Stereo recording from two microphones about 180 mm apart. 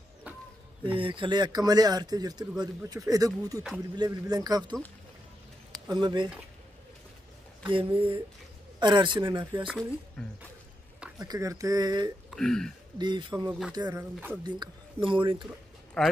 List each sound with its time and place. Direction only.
0.9 s speech: 30° right (ahead or behind)
5.9 s speech: 25° right (ahead or behind)
7.7 s speech: 30° right (ahead or behind)
9.7 s speech: centre (ahead or behind)
11.1 s speech: 20° right (ahead or behind)
12.3 s speech: 5° left (ahead or behind)
12.9 s speech: 25° right (ahead or behind)
13.8 s speech: 10° right (ahead or behind)
14.4 s speech: 25° right (ahead or behind)
16.0 s speech: 5° left (ahead or behind)